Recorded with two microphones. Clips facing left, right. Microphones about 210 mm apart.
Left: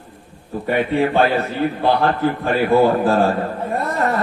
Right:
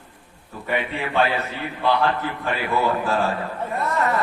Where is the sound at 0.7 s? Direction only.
45° left (ahead or behind).